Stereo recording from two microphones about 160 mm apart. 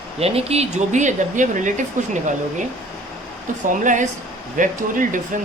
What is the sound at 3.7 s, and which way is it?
Speech, 55° right (ahead or behind).